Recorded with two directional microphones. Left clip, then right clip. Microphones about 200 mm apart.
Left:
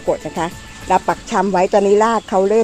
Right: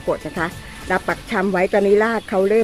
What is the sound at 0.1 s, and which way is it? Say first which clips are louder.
Speech: left 3 dB; 15° left (ahead or behind).